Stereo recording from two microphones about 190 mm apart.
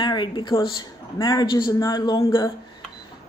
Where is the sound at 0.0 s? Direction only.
25° left (ahead or behind).